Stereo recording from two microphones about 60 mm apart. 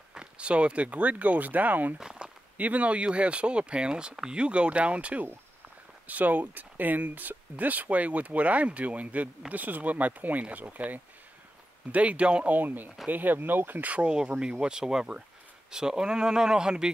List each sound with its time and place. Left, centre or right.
0.1 s speech: centre
2.0 s speech: centre
12.5 s speech: right; by 16.9 s centre